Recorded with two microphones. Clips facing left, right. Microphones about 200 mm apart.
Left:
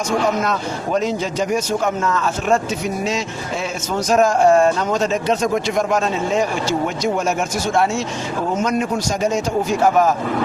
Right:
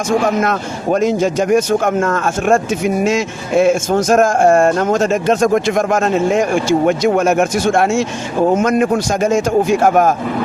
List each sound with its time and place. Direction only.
0.4 s speech: 50° right (ahead or behind)